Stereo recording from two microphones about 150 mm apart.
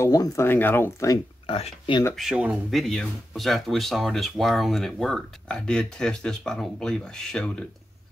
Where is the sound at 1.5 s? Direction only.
40° left (ahead or behind).